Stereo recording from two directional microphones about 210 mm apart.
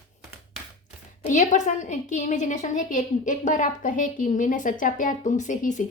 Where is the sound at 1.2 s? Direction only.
35° left (ahead or behind).